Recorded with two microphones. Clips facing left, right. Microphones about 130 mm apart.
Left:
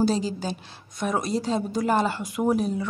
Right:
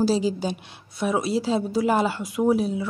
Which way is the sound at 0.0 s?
10° right (ahead or behind).